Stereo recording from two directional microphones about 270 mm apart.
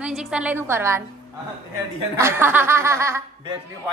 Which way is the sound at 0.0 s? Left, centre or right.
Centre.